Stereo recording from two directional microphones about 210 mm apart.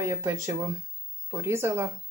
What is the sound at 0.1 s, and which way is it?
Speech, 15° right (ahead or behind).